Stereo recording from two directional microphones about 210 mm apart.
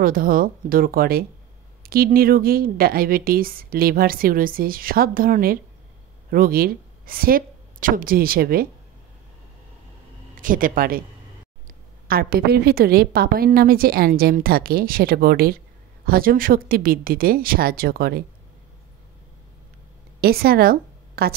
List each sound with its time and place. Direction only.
0.0 s a woman's voice: 40° right (ahead or behind)
10.3 s speech: 40° right (ahead or behind)
12.1 s a woman's voice: 45° right (ahead or behind)
20.2 s a woman's voice: 50° right (ahead or behind)